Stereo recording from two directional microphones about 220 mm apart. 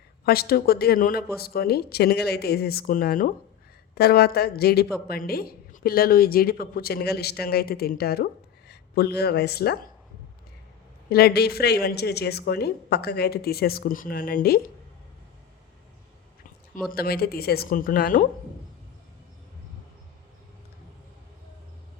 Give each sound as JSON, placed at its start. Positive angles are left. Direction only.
{"t": 0.3, "sound": "a woman's voice", "side_deg": 45}
{"t": 11.1, "sound": "a woman's voice", "side_deg": 45}
{"t": 16.9, "sound": "a woman's voice", "side_deg": 45}